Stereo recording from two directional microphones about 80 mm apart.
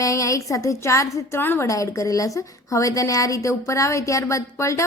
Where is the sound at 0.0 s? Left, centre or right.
Left.